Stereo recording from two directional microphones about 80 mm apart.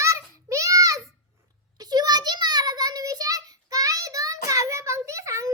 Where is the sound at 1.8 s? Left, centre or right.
Right.